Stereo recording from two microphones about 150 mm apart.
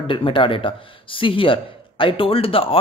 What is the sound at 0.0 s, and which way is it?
Speech, 35° left (ahead or behind).